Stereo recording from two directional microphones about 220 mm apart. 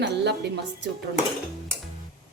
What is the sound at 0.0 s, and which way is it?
Speech, 50° right (ahead or behind).